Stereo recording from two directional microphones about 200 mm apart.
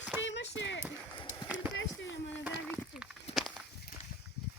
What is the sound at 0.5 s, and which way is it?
Speech, 65° left (ahead or behind).